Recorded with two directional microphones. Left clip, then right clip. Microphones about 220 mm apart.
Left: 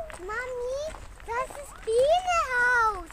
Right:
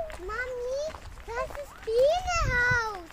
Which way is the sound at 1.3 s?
40° left (ahead or behind).